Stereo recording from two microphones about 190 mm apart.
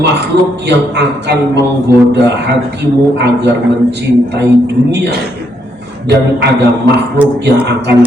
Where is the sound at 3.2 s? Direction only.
65° right (ahead or behind).